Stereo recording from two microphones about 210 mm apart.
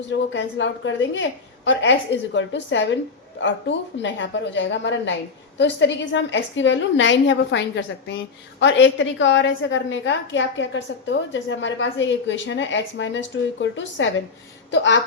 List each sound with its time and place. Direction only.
0.0 s a woman's voice: 55° left (ahead or behind)